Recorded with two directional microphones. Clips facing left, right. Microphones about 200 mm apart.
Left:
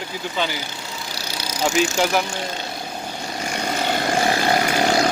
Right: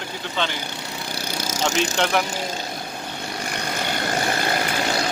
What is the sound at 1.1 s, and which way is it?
Vehicle, 50° right (ahead or behind).